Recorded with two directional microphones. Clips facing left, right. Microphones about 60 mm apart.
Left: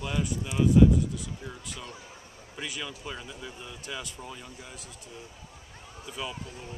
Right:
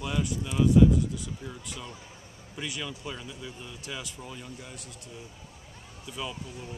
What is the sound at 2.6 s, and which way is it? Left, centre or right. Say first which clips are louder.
Speech: right 1 dB; centre.